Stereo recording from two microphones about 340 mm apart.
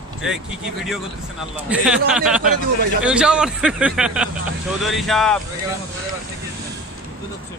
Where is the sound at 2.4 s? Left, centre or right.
Right.